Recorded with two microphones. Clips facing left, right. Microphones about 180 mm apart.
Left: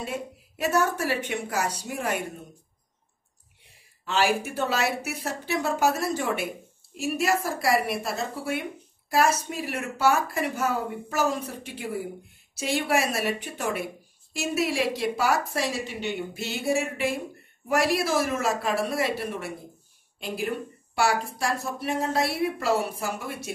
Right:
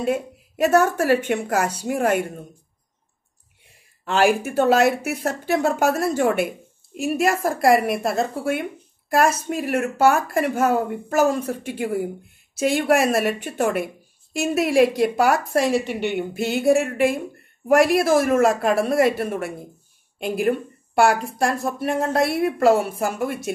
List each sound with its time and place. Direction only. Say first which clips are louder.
0.6 s speech: right 7 dB; 50° right (ahead or behind)
4.0 s speech: right 6 dB; 55° right (ahead or behind)